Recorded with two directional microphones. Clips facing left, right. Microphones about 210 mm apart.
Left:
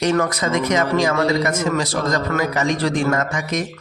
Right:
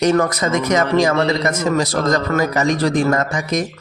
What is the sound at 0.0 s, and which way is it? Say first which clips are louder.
Speech: right 3 dB; 40° right (ahead or behind).